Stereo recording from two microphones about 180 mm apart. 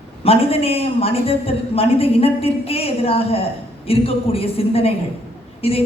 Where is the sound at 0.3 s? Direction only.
30° left (ahead or behind).